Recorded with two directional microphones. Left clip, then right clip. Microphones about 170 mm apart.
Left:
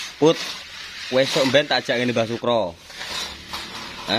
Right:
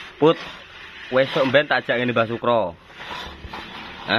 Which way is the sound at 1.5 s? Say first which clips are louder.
Right 1 dB; 25° left (ahead or behind).